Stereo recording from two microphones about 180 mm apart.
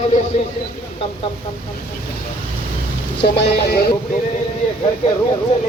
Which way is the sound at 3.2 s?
70° left (ahead or behind).